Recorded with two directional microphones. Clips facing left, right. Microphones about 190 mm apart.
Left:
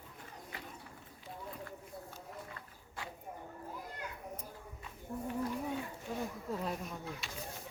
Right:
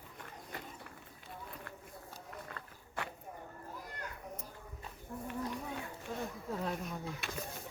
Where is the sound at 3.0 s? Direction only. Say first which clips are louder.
Right 4 dB; 70° right (ahead or behind).